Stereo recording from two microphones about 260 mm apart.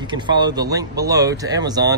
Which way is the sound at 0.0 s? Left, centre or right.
Centre.